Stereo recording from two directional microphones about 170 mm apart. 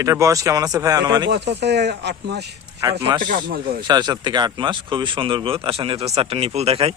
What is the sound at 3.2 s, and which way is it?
Speech, 55° right (ahead or behind).